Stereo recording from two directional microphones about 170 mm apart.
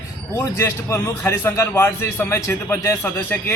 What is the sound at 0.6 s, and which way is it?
A man's voice, 15° left (ahead or behind).